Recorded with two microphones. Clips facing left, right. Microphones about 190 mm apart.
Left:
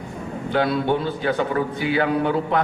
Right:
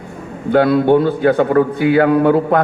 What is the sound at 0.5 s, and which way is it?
A man's voice, 55° right (ahead or behind).